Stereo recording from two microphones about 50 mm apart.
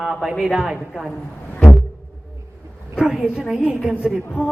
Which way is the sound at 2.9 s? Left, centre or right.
Centre.